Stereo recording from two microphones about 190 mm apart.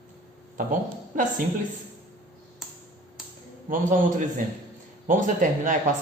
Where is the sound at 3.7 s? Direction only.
45° right (ahead or behind).